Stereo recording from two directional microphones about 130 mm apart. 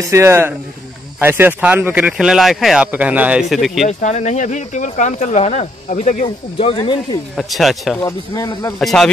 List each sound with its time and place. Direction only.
0.0 s speech: 20° right (ahead or behind); by 3.8 s centre (ahead or behind)
3.8 s speech: 60° left (ahead or behind)
6.2 s speech: 40° left (ahead or behind)
7.3 s speech: centre (ahead or behind)